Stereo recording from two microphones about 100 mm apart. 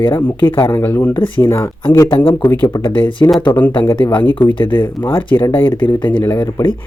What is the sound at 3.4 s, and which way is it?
Speech, 15° left (ahead or behind).